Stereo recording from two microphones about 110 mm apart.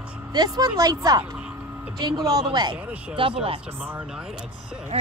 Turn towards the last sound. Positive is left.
turn(degrees=-65)  # may be behind; listen again after turning